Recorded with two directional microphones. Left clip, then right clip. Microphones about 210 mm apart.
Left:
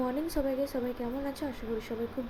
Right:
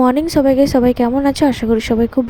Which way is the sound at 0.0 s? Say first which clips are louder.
Right 19 dB; 40° right (ahead or behind).